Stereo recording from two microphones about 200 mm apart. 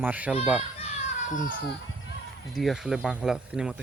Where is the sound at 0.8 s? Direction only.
35° left (ahead or behind).